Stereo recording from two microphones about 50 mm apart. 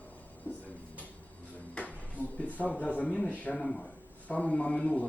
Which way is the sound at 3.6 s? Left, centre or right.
Centre.